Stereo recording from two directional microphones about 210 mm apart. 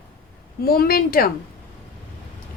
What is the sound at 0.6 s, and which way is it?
Speech, 45° left (ahead or behind).